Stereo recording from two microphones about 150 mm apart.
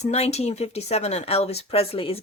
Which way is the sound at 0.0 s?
45° left (ahead or behind).